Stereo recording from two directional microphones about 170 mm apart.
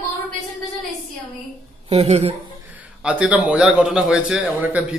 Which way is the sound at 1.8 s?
40° right (ahead or behind).